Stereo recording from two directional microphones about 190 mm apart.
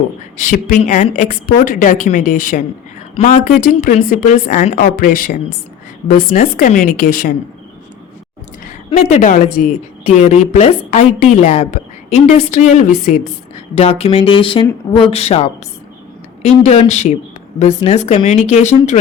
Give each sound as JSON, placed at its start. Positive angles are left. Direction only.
{"t": 0.3, "sound": "speech", "side_deg": 45}
{"t": 8.9, "sound": "a woman's voice", "side_deg": 35}
{"t": 13.7, "sound": "a woman's voice", "side_deg": 30}